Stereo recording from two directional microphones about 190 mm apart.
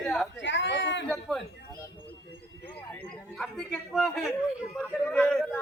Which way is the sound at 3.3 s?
Centre (ahead or behind).